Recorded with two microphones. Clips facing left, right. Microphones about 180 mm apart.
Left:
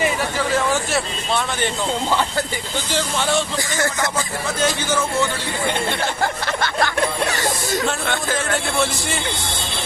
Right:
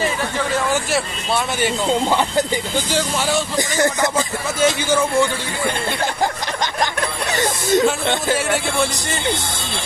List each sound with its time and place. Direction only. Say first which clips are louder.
0.9 s speech: right 1 dB; 5° right (ahead or behind)
2.0 s speech: right 3 dB; 15° right (ahead or behind)
3.5 s speech: right 4 dB; 20° right (ahead or behind)
6.2 s a sound: right 1 dB; 15° right (ahead or behind)
7.7 s speech: right 10 dB; 20° right (ahead or behind)